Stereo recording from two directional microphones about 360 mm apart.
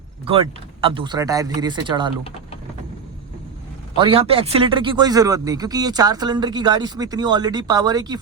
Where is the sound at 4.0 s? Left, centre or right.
Centre.